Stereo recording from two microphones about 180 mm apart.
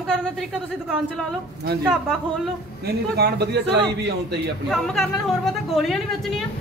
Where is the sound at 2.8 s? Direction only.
65° right (ahead or behind).